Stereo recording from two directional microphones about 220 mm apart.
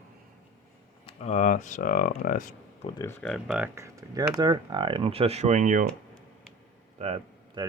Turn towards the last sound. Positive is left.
turn(degrees=-30)  # may be behind; listen again after turning